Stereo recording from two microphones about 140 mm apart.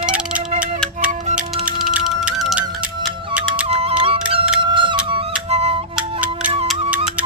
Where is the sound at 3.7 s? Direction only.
45° right (ahead or behind).